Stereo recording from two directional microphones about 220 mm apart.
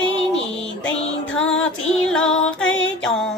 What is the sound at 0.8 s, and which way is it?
Music, 60° left (ahead or behind).